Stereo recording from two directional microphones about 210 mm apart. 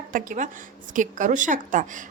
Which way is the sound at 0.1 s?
40° right (ahead or behind).